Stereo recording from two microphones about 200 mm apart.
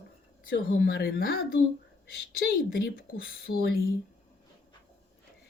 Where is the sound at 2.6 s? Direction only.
50° left (ahead or behind).